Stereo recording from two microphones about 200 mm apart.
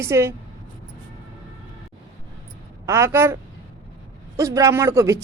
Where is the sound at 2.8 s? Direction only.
15° right (ahead or behind).